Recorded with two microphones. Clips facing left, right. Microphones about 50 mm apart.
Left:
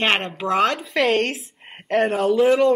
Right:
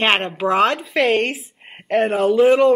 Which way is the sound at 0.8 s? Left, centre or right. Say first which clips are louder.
Right 2 dB; centre.